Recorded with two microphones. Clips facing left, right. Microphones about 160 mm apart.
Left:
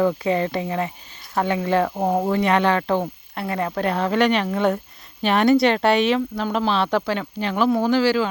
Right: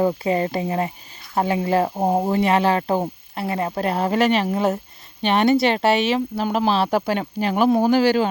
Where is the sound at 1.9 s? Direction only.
20° right (ahead or behind); by 4.2 s 35° right (ahead or behind).